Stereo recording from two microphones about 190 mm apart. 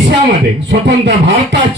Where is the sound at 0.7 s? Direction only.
70° right (ahead or behind).